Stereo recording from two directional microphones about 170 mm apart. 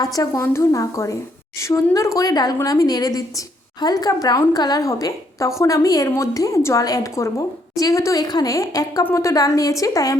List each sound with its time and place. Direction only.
0.0 s a woman's voice: 20° left (ahead or behind)